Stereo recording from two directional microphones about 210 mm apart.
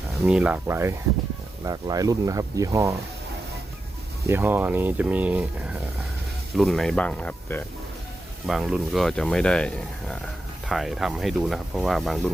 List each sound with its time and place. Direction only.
0.3 s speech: 5° right (ahead or behind)
4.3 s speech: 10° right (ahead or behind)
6.6 s speech: centre (ahead or behind)